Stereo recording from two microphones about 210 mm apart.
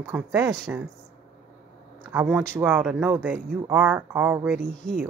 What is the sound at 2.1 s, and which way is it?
Speech, 5° right (ahead or behind).